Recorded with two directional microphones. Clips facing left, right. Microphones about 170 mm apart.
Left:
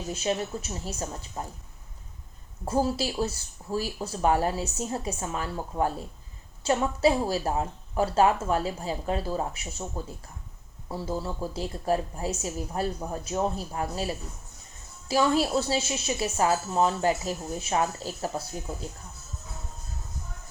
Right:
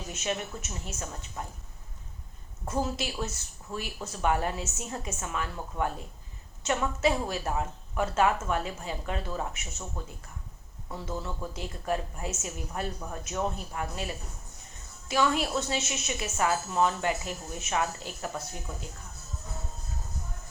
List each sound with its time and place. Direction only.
0.1 s speech: 30° left (ahead or behind)
2.6 s speech: 30° left (ahead or behind)